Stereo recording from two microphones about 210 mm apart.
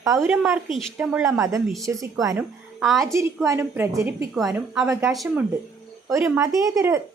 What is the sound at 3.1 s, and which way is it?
A woman's voice, 15° right (ahead or behind).